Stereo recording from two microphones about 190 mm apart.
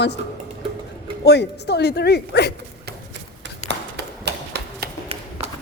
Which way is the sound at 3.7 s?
60° right (ahead or behind).